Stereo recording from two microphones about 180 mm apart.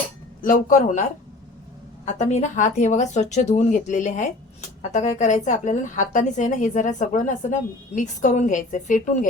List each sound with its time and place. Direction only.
0.4 s speech: 45° left (ahead or behind)
2.0 s speech: 40° left (ahead or behind)